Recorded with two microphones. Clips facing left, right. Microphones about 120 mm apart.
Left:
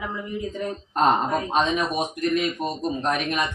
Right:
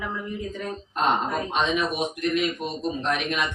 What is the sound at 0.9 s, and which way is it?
A man's voice, 40° left (ahead or behind).